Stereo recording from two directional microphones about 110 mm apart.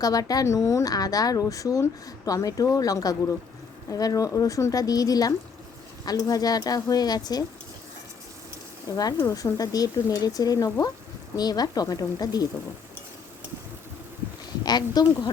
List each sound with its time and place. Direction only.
0.0 s speech: 35° left (ahead or behind)
9.1 s speech: 30° left (ahead or behind)
14.6 s speech: 40° left (ahead or behind)